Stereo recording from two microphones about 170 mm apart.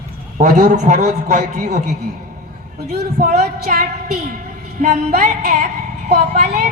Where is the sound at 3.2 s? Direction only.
55° right (ahead or behind).